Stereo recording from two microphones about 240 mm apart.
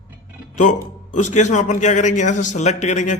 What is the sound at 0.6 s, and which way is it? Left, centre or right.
A man's voice, left.